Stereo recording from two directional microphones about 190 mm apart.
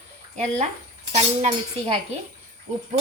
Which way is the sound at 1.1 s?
35° right (ahead or behind).